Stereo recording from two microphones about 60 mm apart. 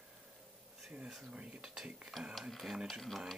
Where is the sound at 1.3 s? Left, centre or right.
Centre.